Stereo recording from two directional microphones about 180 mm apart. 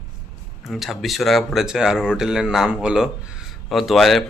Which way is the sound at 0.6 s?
Centre (ahead or behind).